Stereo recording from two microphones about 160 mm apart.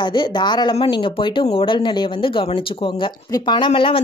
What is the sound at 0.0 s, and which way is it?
A woman's voice, 30° left (ahead or behind).